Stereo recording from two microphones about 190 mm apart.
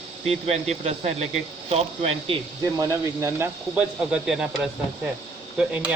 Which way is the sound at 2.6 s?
15° right (ahead or behind).